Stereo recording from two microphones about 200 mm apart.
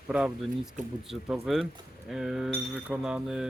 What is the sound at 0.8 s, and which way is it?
Speech, 40° right (ahead or behind).